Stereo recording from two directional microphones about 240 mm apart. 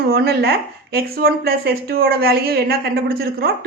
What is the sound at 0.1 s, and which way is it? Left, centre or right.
Speech, right.